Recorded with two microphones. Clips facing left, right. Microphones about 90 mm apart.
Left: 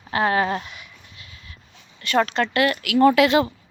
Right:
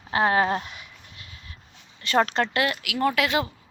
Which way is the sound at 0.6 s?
40° right (ahead or behind).